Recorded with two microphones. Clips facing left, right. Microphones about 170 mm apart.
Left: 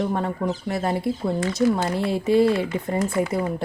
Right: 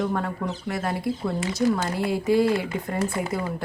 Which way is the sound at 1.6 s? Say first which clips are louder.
Left 2 dB; 20° right (ahead or behind).